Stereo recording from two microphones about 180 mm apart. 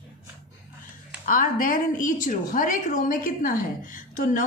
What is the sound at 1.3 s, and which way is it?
A woman's voice, 50° left (ahead or behind).